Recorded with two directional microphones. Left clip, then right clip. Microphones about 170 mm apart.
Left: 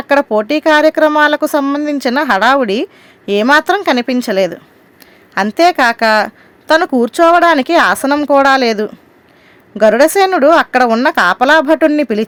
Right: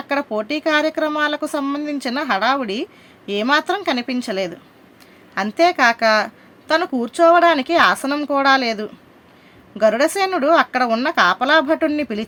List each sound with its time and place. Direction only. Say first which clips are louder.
0.1 s speech: left 10 dB; 50° left (ahead or behind)